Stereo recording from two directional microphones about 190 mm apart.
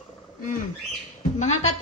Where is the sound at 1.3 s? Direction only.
35° left (ahead or behind).